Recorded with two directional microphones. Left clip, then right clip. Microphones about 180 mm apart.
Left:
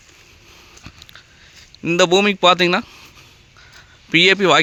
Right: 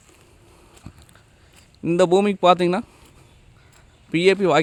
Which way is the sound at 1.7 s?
10° right (ahead or behind).